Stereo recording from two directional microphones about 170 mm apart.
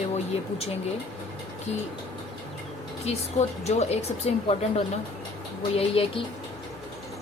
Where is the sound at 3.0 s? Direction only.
40° left (ahead or behind).